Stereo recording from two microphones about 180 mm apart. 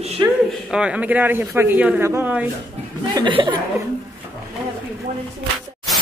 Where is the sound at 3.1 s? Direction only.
25° right (ahead or behind).